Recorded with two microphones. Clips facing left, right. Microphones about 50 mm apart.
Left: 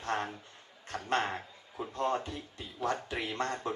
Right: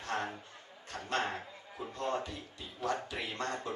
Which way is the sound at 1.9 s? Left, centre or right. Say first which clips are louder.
Left 4 dB; left.